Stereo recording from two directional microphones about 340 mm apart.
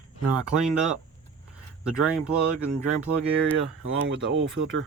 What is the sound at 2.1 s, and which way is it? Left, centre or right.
Speech, centre.